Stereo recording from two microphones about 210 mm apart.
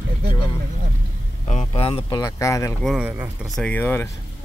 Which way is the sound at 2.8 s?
5° right (ahead or behind).